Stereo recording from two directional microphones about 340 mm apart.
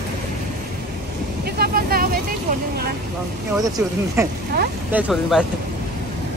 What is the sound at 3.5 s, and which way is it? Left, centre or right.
Speech, centre.